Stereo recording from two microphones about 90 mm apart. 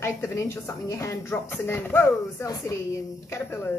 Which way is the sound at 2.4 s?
35° left (ahead or behind).